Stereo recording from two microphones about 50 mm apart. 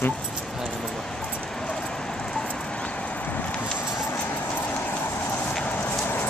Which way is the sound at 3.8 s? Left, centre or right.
Left.